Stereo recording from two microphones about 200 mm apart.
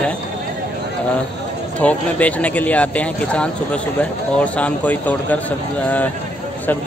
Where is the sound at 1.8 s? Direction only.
5° left (ahead or behind).